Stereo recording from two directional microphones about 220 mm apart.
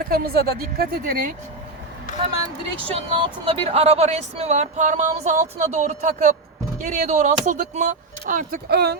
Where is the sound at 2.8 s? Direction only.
25° right (ahead or behind).